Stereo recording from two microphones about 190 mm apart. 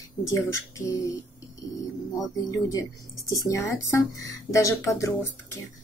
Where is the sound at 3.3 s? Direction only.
15° left (ahead or behind).